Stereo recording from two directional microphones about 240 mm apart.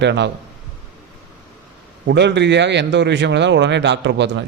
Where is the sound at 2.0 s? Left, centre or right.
Right.